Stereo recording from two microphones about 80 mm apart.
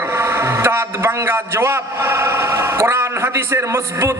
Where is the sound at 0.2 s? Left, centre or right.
Right.